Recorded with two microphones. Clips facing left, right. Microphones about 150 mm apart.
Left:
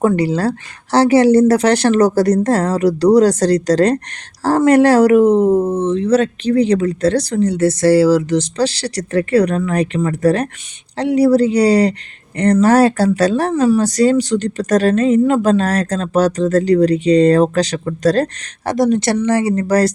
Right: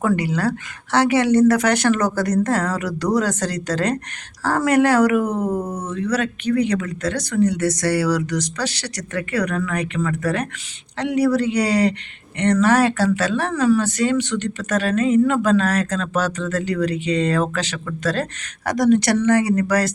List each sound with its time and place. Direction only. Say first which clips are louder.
0.0 s speech: left 5 dB; 30° left (ahead or behind)